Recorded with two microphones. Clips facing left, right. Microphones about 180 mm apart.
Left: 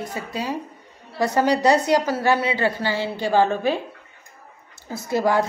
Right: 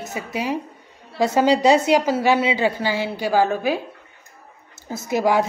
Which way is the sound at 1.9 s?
10° right (ahead or behind).